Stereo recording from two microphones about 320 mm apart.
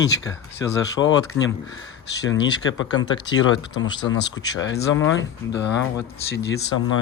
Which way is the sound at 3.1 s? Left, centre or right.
Centre.